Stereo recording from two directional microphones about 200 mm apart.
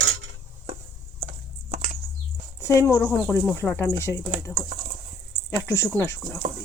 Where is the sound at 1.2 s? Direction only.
35° right (ahead or behind).